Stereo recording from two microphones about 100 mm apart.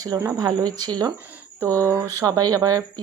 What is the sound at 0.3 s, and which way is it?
Speech, 40° right (ahead or behind).